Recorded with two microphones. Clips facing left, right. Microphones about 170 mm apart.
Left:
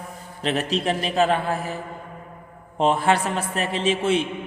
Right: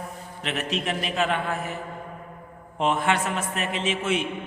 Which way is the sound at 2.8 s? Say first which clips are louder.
Left 4 dB; 35° left (ahead or behind).